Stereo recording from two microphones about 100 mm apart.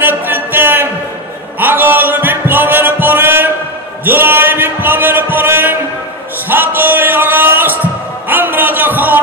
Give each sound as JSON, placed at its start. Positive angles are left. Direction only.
{"t": 0.0, "sound": "music", "side_deg": -20}
{"t": 4.0, "sound": "a sound", "side_deg": -20}
{"t": 6.5, "sound": "music", "side_deg": -20}